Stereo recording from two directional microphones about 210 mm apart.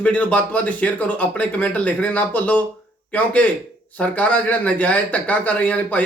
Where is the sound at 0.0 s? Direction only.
5° left (ahead or behind).